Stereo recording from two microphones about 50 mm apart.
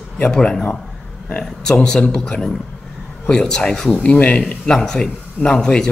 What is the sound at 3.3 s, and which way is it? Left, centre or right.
Speech, centre.